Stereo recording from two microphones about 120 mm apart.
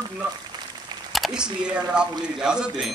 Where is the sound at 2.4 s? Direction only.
5° right (ahead or behind).